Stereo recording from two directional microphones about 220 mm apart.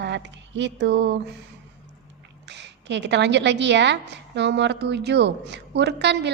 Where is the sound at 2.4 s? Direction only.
50° right (ahead or behind).